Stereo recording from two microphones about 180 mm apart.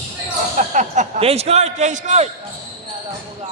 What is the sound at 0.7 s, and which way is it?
A man's voice, 40° right (ahead or behind).